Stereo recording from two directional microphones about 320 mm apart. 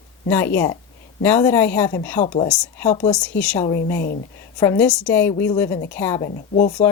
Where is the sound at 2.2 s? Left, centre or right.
Left.